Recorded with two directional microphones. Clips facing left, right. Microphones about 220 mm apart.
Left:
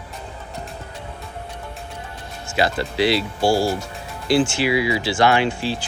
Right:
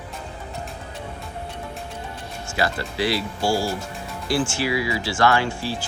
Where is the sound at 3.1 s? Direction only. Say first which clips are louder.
Left 4 dB; 65° left (ahead or behind).